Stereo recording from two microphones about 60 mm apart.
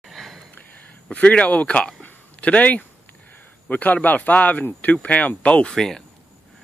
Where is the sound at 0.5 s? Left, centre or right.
Left.